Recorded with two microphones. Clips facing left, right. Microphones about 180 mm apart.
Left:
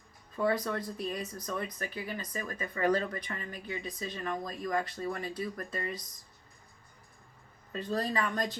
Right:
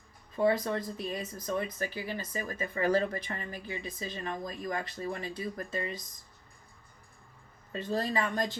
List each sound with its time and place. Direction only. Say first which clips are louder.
0.3 s speech: right 3 dB; 25° right (ahead or behind)
8.1 s speech: right 1 dB; 25° right (ahead or behind)